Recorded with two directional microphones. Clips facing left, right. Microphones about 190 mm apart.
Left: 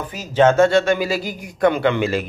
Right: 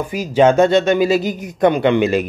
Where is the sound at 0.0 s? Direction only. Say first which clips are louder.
Right 2 dB; 10° right (ahead or behind).